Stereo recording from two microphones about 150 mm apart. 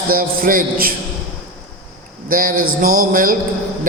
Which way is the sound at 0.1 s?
70° right (ahead or behind).